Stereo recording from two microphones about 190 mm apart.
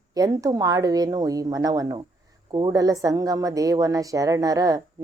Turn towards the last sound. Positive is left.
turn(degrees=-20)  # may be behind; listen again after turning